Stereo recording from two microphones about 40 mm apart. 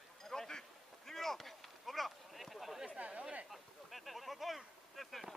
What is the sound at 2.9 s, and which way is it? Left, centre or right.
Chatter, right.